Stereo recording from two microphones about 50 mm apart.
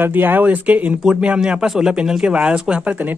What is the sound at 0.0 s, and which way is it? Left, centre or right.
Speech, right.